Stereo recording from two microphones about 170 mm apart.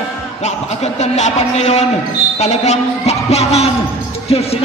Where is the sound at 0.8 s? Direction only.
40° left (ahead or behind).